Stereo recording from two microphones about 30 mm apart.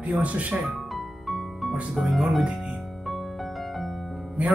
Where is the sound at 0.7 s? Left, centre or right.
Centre.